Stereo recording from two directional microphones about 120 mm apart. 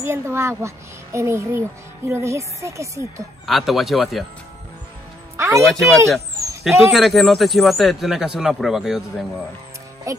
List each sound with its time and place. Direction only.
0.0 s a child's voice: 20° right (ahead or behind)
3.4 s speech: centre (ahead or behind)
5.6 s speech: centre (ahead or behind)
10.1 s a child's voice: 25° right (ahead or behind)